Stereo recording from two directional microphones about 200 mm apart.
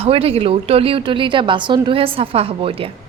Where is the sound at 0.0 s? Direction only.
30° right (ahead or behind).